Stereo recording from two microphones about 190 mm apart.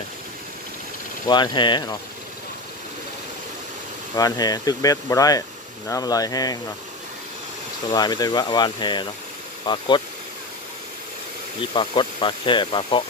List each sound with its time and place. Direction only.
1.2 s speech: 25° left (ahead or behind)
4.1 s speech: 20° left (ahead or behind)
7.9 s speech: 20° left (ahead or behind)
11.7 s speech: 25° left (ahead or behind)